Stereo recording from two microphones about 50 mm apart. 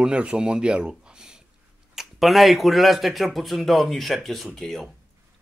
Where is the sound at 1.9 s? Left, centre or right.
Centre.